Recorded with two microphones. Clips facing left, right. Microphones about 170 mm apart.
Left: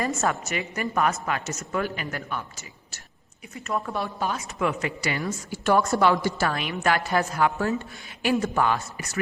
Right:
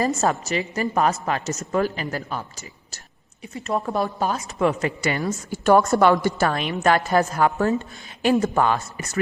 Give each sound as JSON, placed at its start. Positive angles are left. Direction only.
{"t": 0.0, "sound": "a woman's voice", "side_deg": -35}